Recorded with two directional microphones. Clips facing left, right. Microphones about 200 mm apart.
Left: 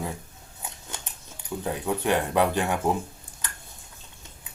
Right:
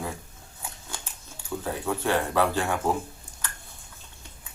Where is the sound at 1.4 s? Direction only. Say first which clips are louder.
Left 1 dB; 20° left (ahead or behind).